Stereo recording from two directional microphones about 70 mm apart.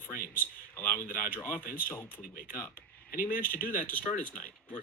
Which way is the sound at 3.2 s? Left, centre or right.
Left.